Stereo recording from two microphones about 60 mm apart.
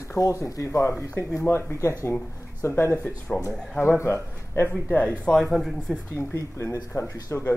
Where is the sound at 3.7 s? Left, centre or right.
Left.